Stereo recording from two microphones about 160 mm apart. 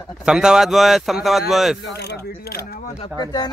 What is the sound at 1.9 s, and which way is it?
Mechanisms, 90° left.